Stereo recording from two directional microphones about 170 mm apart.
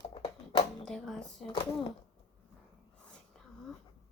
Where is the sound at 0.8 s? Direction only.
Centre (ahead or behind).